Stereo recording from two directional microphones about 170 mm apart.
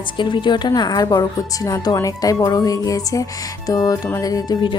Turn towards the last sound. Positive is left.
turn(degrees=25)  # may be behind; listen again after turning